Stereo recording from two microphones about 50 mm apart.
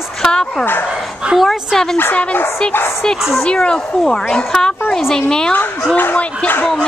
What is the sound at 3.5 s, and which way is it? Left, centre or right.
A woman's voice, centre.